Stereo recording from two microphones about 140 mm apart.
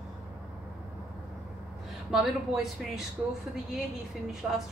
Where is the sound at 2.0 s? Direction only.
5° right (ahead or behind).